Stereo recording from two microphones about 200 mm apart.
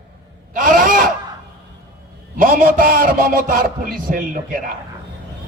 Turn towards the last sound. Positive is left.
turn(degrees=-45)  # may be behind; listen again after turning